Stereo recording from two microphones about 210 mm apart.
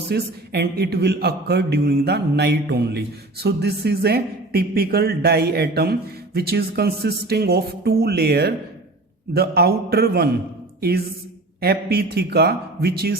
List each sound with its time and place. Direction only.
0.1 s a man's voice: 50° right (ahead or behind)